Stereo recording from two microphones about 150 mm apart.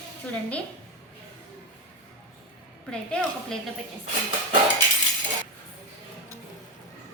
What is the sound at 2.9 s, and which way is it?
Speech, 5° left (ahead or behind).